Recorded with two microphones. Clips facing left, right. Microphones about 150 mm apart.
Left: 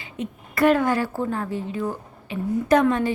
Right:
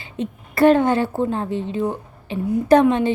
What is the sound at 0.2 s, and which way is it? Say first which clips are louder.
A woman's voice: right 4 dB; 30° right (ahead or behind).